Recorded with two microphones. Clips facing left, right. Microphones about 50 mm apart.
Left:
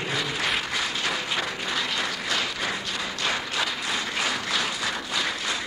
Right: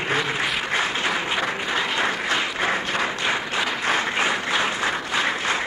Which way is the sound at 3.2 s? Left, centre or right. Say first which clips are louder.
Right 3 dB; right.